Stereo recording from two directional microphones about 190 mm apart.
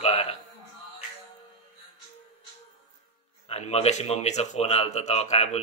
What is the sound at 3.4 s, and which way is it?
Speech, 30° left (ahead or behind).